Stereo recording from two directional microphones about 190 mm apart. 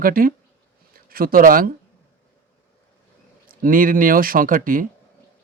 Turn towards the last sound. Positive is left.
turn(degrees=-45)  # may be behind; listen again after turning